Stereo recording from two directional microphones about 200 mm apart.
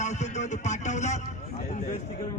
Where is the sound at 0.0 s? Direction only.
35° left (ahead or behind).